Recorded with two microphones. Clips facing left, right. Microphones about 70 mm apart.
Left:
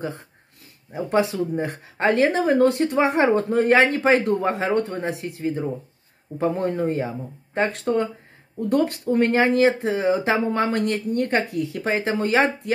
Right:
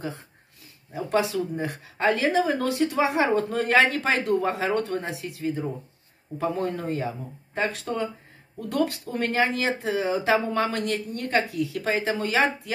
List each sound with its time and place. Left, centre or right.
0.9 s speech: left
3.4 s speech: left
8.5 s speech: left